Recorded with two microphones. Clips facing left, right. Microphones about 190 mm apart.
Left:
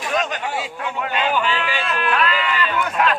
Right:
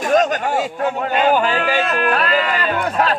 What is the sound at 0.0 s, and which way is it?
Speech, 45° right (ahead or behind).